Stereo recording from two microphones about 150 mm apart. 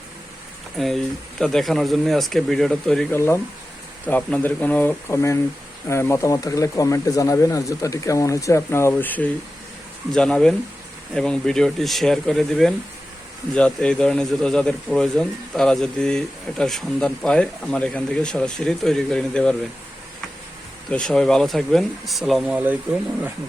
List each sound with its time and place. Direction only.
0.8 s speech: centre (ahead or behind)
3.1 s speech: 15° left (ahead or behind)
20.9 s speech: 5° left (ahead or behind)